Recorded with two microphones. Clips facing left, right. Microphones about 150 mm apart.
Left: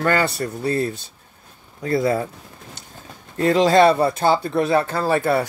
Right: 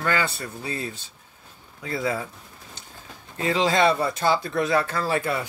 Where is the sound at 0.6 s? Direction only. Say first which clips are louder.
Left 10 dB; 60° left (ahead or behind).